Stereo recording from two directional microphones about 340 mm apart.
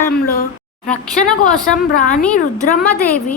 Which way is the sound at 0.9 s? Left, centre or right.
Centre.